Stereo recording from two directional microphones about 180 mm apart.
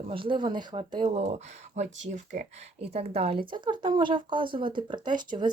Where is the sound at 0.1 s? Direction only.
30° right (ahead or behind).